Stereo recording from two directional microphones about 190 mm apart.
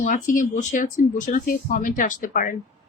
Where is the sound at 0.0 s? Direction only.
45° left (ahead or behind).